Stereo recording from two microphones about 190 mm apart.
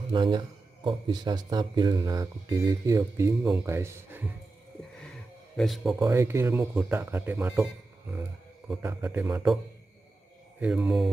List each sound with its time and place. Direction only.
0.1 s speech: 25° right (ahead or behind)
5.6 s mantra: centre (ahead or behind)
5.9 s speech: 15° right (ahead or behind)
10.6 s mantra: 5° right (ahead or behind)